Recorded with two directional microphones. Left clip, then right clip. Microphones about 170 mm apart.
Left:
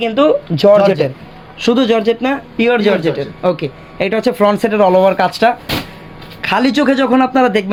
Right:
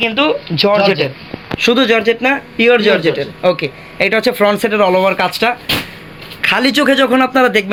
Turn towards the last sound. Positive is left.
turn(degrees=40)  # may be behind; listen again after turning